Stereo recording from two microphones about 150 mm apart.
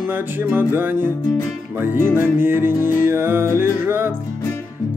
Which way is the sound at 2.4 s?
15° right (ahead or behind).